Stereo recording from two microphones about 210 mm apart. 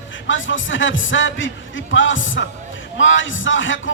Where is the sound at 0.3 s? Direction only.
65° left (ahead or behind).